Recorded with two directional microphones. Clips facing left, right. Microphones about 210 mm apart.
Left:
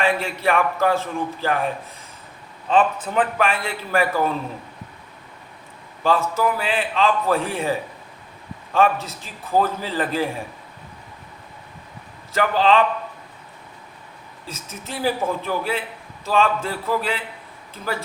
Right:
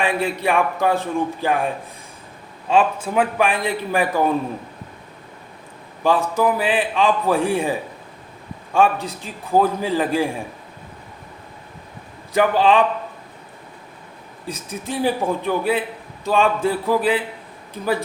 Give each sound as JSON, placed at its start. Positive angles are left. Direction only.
{"t": 0.0, "sound": "a man's voice", "side_deg": -15}
{"t": 6.0, "sound": "a man's voice", "side_deg": -15}
{"t": 12.3, "sound": "a man's voice", "side_deg": -15}
{"t": 14.4, "sound": "a man's voice", "side_deg": -15}